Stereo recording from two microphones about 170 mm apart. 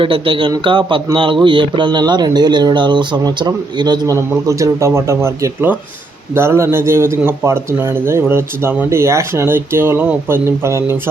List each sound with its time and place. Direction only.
0.0 s a man's voice: 30° right (ahead or behind)